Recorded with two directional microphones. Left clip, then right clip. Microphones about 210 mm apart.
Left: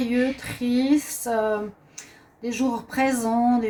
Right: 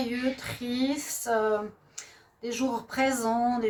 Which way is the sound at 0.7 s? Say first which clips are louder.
Left 8 dB; 45° right (ahead or behind).